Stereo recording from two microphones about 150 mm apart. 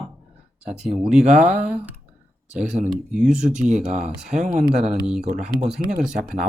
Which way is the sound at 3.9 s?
45° right (ahead or behind).